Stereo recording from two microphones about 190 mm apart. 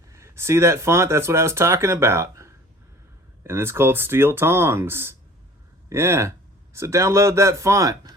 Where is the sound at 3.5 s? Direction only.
15° right (ahead or behind).